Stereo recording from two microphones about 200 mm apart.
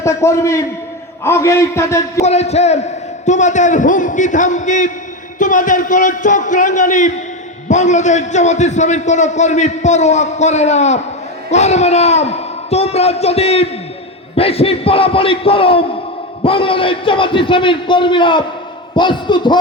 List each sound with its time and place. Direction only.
0.0 s a man's voice: 15° left (ahead or behind)
2.2 s a man's voice: 35° left (ahead or behind)